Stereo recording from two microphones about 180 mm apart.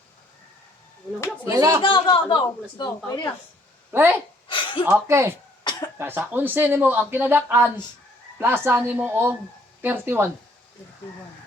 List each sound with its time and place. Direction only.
1.5 s speech: 15° right (ahead or behind)
1.8 s speech: 30° left (ahead or behind)
3.9 s speech: 10° right (ahead or behind)
4.4 s a sound: 25° left (ahead or behind)
4.9 s speech: 15° right (ahead or behind)